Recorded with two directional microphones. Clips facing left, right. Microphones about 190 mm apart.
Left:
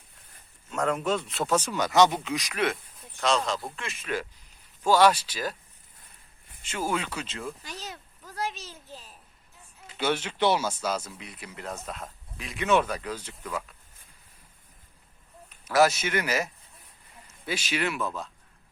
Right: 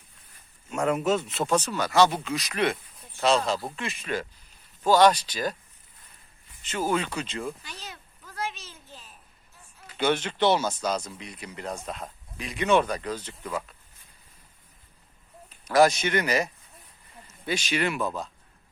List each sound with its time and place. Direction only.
0.7 s speech: 10° right (ahead or behind)
1.6 s speech: 15° left (ahead or behind)
6.7 s speech: 10° left (ahead or behind)
7.6 s a sound: 40° left (ahead or behind)
10.0 s speech: 5° left (ahead or behind)
13.4 s speech: 5° right (ahead or behind)
15.6 s speech: 5° left (ahead or behind)